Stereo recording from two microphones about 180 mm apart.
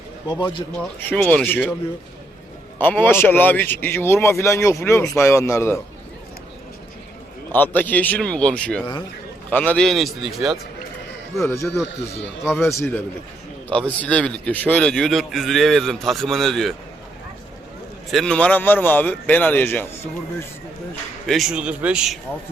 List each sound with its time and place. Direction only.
0.3 s speech: 25° left (ahead or behind)
0.8 s a man's voice: 5° left (ahead or behind)
2.7 s speech: 10° left (ahead or behind)
7.5 s a man's voice: 10° left (ahead or behind)
11.3 s a man's voice: 15° left (ahead or behind)
18.1 s speech: 5° left (ahead or behind)
21.2 s a man's voice: centre (ahead or behind)